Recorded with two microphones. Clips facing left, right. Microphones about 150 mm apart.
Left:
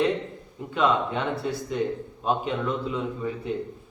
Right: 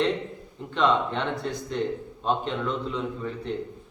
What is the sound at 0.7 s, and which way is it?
A man's voice, 5° left (ahead or behind).